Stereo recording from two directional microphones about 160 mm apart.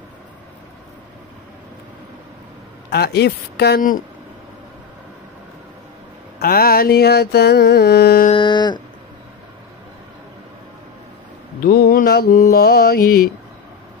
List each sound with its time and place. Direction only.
2.9 s carnatic music: 90° left; by 4.0 s 65° left (ahead or behind)
6.4 s carnatic music: 70° left (ahead or behind)
8.3 s a sound: 30° left (ahead or behind)
11.6 s mantra: 70° left (ahead or behind)